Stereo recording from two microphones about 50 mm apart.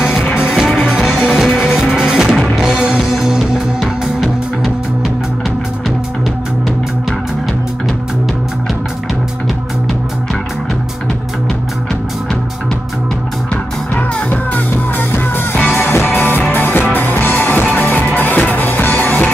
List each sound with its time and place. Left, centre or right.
0.2 s music: centre
0.5 s music: centre
1.1 s music: centre
2.3 s music: centre
13.9 s music: left
15.8 s music: left